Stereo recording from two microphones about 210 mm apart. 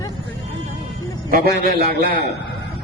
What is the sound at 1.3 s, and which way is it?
Speech, 45° right (ahead or behind).